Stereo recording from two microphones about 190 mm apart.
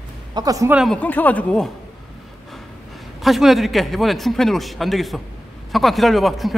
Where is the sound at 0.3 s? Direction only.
20° right (ahead or behind).